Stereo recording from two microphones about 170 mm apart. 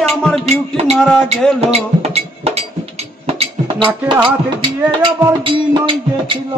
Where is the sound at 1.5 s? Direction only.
40° right (ahead or behind).